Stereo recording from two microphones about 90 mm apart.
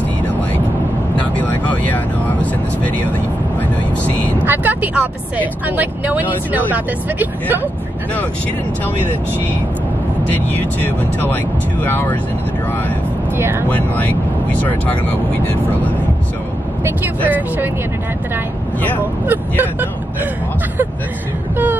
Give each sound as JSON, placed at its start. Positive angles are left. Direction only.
{"t": 1.3, "sound": "vehicle", "side_deg": 20}
{"t": 4.5, "sound": "speech", "side_deg": -20}
{"t": 10.3, "sound": "speech", "side_deg": 20}
{"t": 13.4, "sound": "speech", "side_deg": -25}
{"t": 13.7, "sound": "speech", "side_deg": 20}
{"t": 19.2, "sound": "speech", "side_deg": -20}